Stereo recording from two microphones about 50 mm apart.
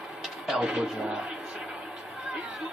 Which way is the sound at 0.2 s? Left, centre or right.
Centre.